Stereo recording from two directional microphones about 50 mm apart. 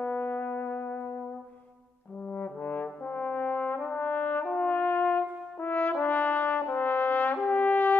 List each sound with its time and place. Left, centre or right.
0.0 s music: left
2.2 s brass instrument: left